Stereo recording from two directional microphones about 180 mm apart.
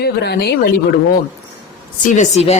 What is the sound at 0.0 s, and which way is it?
Speech, 65° left (ahead or behind).